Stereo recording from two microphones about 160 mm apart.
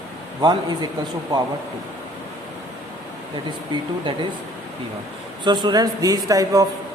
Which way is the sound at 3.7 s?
30° right (ahead or behind).